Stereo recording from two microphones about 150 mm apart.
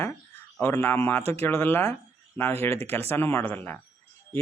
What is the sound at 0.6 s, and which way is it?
A man's voice, 15° left (ahead or behind).